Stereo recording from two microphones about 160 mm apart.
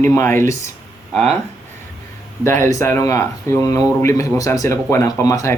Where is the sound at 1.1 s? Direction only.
Centre (ahead or behind).